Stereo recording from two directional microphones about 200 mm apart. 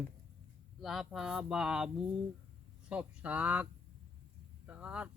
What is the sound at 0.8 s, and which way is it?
A man's voice, centre (ahead or behind).